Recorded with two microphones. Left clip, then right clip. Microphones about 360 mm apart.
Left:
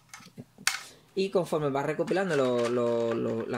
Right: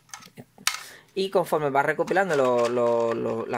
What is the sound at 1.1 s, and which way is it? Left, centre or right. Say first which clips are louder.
Speech: right 4 dB; right.